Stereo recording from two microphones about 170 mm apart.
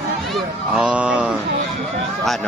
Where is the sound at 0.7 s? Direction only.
5° right (ahead or behind).